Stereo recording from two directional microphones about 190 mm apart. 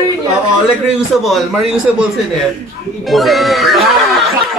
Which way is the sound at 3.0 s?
Centre (ahead or behind).